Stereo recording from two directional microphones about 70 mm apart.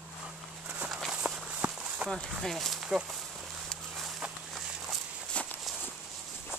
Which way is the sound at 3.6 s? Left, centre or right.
Centre.